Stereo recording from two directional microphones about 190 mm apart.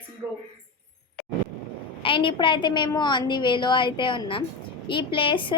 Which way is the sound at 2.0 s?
25° left (ahead or behind).